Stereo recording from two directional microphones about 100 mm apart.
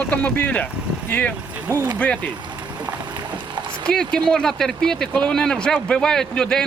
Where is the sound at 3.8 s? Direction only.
10° left (ahead or behind).